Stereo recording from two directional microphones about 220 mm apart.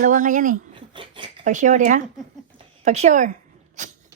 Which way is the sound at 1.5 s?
35° right (ahead or behind).